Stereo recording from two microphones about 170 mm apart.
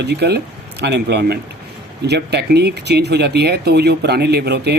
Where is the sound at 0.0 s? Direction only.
75° right (ahead or behind).